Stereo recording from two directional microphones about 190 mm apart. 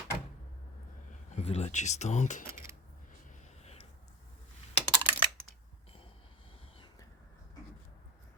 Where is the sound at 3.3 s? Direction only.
35° left (ahead or behind).